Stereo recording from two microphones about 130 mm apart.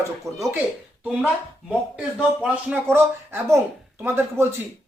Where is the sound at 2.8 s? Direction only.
20° right (ahead or behind).